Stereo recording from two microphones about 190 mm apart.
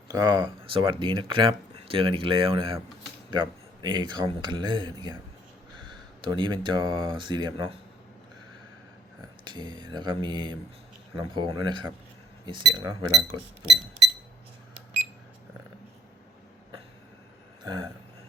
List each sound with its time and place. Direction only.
0.1 s speech: 20° right (ahead or behind)
6.2 s speech: 25° right (ahead or behind)
9.4 s speech: 25° right (ahead or behind)